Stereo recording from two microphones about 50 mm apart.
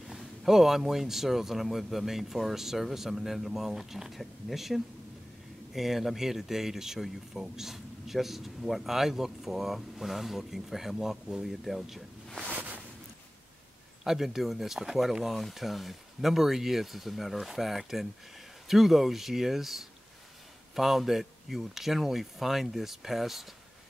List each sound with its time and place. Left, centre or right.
0.0 s speech: centre
12.4 s a sound: right
14.0 s speech: centre